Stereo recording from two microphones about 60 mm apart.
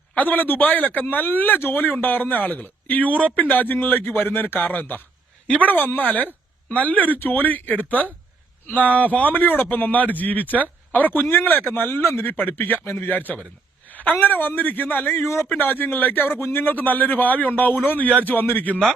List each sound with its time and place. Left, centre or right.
0.2 s speech: left
15.2 s a man's voice: left
15.5 s speech: left